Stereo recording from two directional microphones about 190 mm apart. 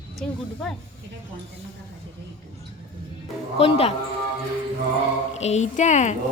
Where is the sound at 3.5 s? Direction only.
30° left (ahead or behind).